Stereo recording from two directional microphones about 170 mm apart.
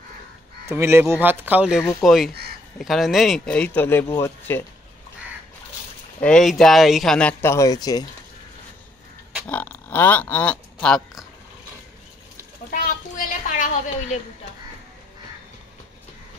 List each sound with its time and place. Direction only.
0.7 s speech: 15° right (ahead or behind); by 4.6 s 15° left (ahead or behind)
6.2 s speech: 5° left (ahead or behind); by 8.1 s 20° left (ahead or behind)
9.5 s speech: 10° left (ahead or behind)
12.7 s a sound: 55° left (ahead or behind)